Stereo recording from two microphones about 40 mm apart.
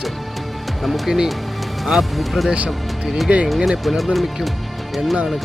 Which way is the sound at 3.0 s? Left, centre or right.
Centre.